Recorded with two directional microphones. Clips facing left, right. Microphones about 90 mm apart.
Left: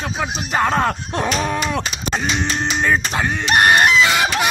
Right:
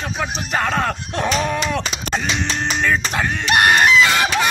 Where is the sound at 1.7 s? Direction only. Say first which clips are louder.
Even; 20° left (ahead or behind).